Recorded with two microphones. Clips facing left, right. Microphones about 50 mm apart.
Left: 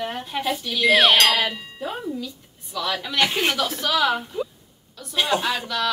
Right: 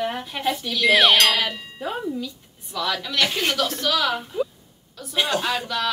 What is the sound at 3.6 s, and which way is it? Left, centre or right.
A woman's voice, centre.